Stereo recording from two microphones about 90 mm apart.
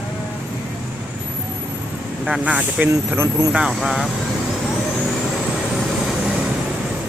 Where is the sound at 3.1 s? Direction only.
25° right (ahead or behind).